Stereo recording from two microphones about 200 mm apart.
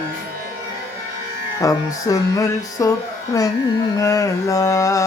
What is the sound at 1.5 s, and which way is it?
Music, 15° left (ahead or behind).